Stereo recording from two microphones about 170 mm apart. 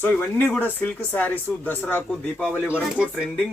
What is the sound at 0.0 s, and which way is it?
Speech, 10° left (ahead or behind).